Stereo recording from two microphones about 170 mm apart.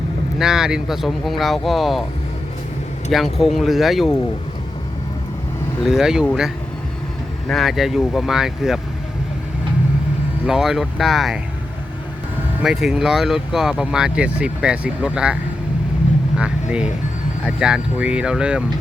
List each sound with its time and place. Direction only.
0.3 s speech: 5° right (ahead or behind)
3.1 s speech: centre (ahead or behind)
5.8 s speech: 5° right (ahead or behind)
7.4 s speech: centre (ahead or behind)
10.4 s speech: 5° right (ahead or behind)
12.5 s speech: 5° right (ahead or behind)
16.4 s speech: 5° right (ahead or behind)